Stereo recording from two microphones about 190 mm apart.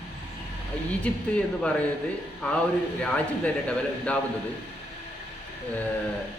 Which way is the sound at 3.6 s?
5° left (ahead or behind).